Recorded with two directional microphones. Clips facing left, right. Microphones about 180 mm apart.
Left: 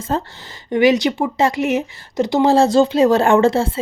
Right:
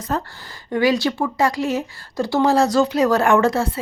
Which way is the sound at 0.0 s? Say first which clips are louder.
Left 3 dB; 25° left (ahead or behind).